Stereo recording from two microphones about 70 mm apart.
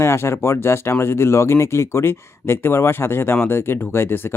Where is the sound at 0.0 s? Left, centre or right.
Left.